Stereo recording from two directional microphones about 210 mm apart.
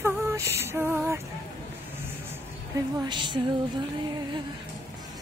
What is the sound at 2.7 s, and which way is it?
Speech, 20° right (ahead or behind).